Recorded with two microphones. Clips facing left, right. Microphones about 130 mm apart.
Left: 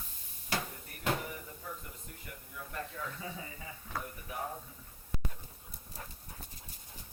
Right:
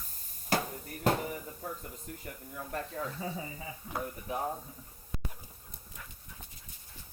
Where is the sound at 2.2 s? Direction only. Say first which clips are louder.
Right 2 dB; 45° right (ahead or behind).